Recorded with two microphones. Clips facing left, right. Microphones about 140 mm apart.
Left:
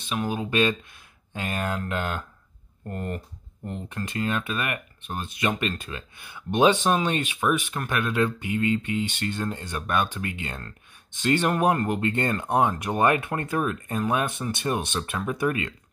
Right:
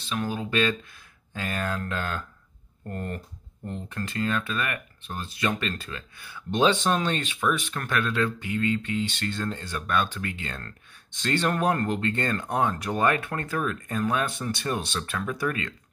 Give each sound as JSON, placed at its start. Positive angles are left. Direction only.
{"t": 0.1, "sound": "speech", "side_deg": 15}